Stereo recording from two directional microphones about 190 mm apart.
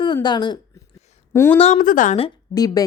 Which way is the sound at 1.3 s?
15° left (ahead or behind).